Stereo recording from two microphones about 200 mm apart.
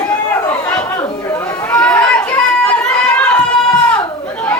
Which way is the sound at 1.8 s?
5° left (ahead or behind).